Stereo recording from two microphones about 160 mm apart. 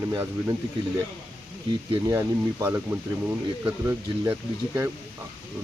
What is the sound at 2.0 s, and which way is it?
Speech, 20° right (ahead or behind).